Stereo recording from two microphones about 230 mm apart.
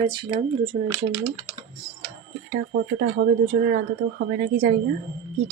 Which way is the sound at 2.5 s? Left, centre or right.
Right.